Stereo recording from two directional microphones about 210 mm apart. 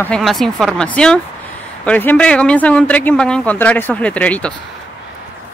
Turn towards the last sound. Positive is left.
turn(degrees=5)  # may be behind; listen again after turning